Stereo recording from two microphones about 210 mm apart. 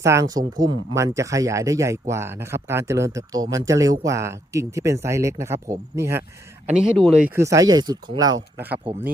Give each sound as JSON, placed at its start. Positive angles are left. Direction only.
{"t": 0.0, "sound": "speech", "side_deg": -15}
{"t": 6.7, "sound": "speech", "side_deg": 0}
{"t": 7.3, "sound": "speech", "side_deg": -15}
{"t": 8.5, "sound": "speech", "side_deg": -10}